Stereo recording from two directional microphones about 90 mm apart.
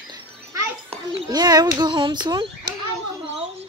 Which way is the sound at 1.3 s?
50° right (ahead or behind).